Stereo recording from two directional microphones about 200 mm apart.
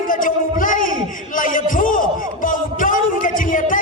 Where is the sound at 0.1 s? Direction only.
40° left (ahead or behind).